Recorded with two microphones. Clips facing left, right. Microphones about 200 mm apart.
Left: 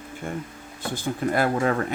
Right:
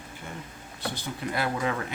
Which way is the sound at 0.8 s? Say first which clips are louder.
Left 7 dB; 50° left (ahead or behind).